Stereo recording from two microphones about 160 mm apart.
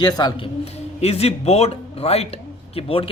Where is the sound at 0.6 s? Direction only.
40° left (ahead or behind).